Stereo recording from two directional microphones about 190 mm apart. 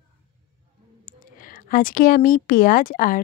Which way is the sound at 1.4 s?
45° left (ahead or behind).